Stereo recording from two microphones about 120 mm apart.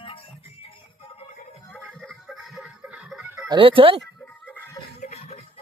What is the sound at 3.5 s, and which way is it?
Speech, 45° right (ahead or behind).